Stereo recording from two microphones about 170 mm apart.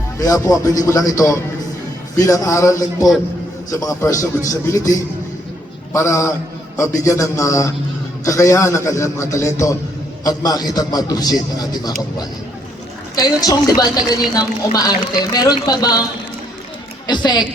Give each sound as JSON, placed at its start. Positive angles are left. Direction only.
{"t": 0.2, "sound": "a man's voice", "side_deg": 20}
{"t": 13.1, "sound": "speech", "side_deg": 20}
{"t": 17.1, "sound": "speech", "side_deg": 25}